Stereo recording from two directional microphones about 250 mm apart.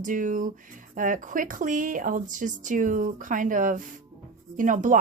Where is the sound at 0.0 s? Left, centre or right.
Right.